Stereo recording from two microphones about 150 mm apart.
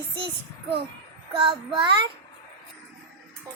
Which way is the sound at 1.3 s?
30° right (ahead or behind).